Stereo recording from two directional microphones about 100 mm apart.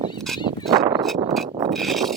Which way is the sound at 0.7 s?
40° right (ahead or behind).